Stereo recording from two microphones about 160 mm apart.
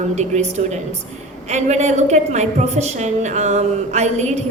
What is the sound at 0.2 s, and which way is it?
A woman's voice, 45° right (ahead or behind).